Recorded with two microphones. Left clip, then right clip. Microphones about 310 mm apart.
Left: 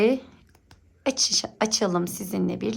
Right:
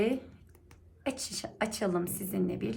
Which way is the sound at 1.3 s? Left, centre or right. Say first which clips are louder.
Left 10 dB; centre.